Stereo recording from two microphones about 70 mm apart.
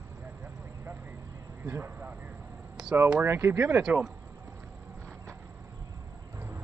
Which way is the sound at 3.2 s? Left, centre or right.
Right.